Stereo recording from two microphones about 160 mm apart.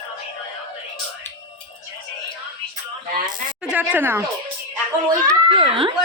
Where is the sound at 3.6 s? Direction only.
10° right (ahead or behind).